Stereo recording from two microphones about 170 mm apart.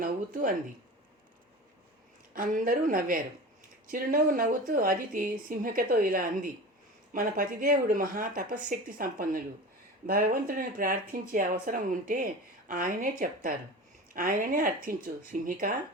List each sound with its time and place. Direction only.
0.0 s speech: 50° right (ahead or behind)
2.3 s a woman's voice: 55° right (ahead or behind)